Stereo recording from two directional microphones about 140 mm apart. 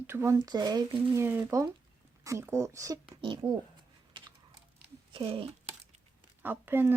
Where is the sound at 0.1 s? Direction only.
15° right (ahead or behind).